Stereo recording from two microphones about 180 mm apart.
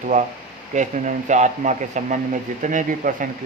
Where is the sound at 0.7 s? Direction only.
45° right (ahead or behind).